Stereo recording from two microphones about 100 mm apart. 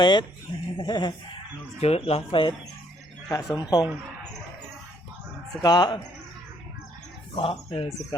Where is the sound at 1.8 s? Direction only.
90° left; by 2.6 s 60° left (ahead or behind).